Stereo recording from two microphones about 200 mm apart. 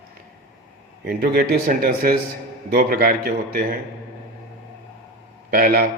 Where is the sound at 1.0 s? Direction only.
50° right (ahead or behind).